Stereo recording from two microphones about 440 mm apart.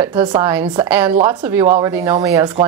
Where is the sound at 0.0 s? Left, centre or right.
Centre.